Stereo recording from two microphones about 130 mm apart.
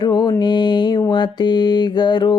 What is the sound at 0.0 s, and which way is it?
Mantra, 30° left (ahead or behind).